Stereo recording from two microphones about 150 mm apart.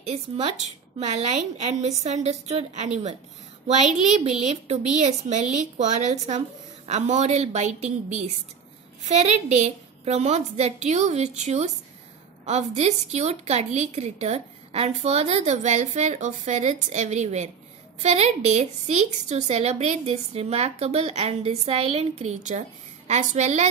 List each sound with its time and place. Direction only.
0.0 s a woman's voice: 45° right (ahead or behind)
4.4 s a woman's voice: 50° right (ahead or behind)
9.0 s a woman's voice: 50° right (ahead or behind)